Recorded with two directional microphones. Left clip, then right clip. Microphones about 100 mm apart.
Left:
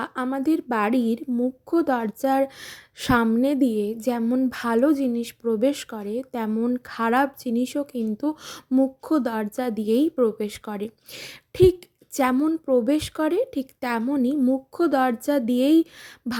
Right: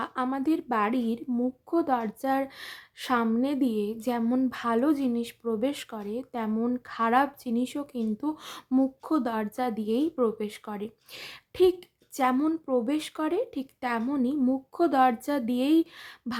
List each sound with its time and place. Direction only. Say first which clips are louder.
0.3 s speech: left 7 dB; 25° left (ahead or behind)
0.8 s a woman's voice: left 4 dB; 40° left (ahead or behind)
4.2 s speech: left 2 dB; 10° left (ahead or behind)
4.4 s a woman's voice: left 5 dB; 30° left (ahead or behind)
4.9 s speech: left 4 dB; 20° left (ahead or behind)
6.5 s speech: left 4 dB; 15° left (ahead or behind)
6.7 s a woman's voice: left 1 dB; 35° left (ahead or behind)
14.3 s speech: left 4 dB; 15° left (ahead or behind)
16.3 s a sound: left 5 dB; 60° left (ahead or behind)